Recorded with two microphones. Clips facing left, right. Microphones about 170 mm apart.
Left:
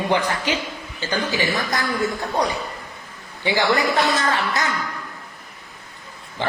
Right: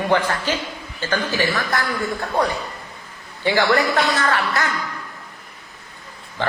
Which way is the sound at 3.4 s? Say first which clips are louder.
Right 2 dB; 15° left (ahead or behind).